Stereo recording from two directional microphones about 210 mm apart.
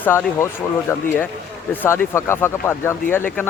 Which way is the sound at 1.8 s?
10° left (ahead or behind).